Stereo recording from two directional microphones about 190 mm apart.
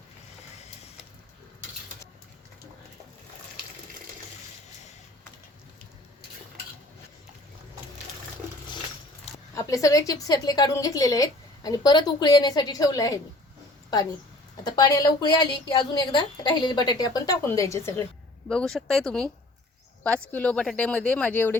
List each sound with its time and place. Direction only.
9.6 s a woman's voice: 15° left (ahead or behind)
14.6 s a woman's voice: 20° left (ahead or behind); by 19.3 s 5° left (ahead or behind)
20.3 s speech: 5° left (ahead or behind)